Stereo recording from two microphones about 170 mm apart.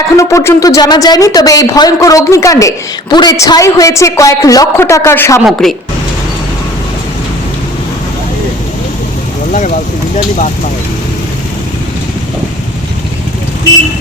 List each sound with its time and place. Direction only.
0.2 s speech: 15° left (ahead or behind)
5.5 s a woman's voice: centre (ahead or behind)
9.5 s speech: 50° left (ahead or behind)